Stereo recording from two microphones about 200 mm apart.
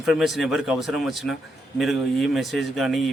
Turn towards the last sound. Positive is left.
turn(degrees=0)  # may be behind; listen again after turning